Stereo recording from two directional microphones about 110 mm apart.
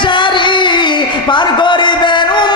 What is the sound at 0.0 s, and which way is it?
Music, 45° left (ahead or behind).